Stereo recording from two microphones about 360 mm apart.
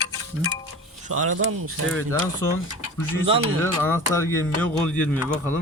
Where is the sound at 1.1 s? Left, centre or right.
Right.